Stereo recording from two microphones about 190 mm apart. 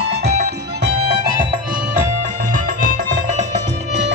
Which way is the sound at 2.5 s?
45° right (ahead or behind).